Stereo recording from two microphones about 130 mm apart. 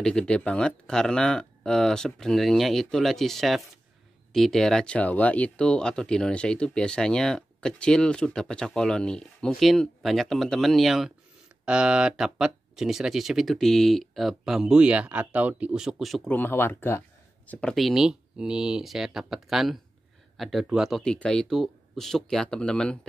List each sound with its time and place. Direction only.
0.0 s speech: 5° left (ahead or behind)
16.3 s speech: 15° left (ahead or behind)